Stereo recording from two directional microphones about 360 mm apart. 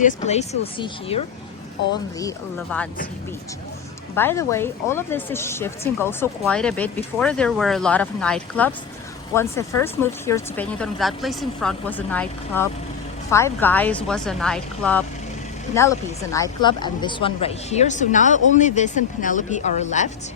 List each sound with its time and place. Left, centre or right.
0.0 s speech: centre
4.1 s speech: centre